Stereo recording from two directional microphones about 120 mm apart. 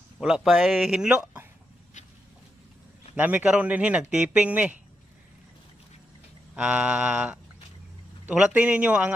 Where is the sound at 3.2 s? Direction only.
15° right (ahead or behind).